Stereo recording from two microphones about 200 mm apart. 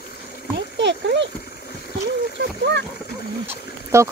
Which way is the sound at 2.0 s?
60° right (ahead or behind).